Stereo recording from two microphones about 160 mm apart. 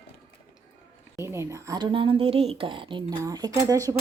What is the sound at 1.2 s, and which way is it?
Speech, 15° right (ahead or behind).